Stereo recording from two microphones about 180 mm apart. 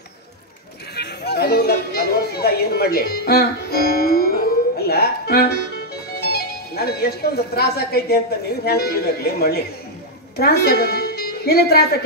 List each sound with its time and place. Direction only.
0.9 s a woman's voice: 65° left (ahead or behind)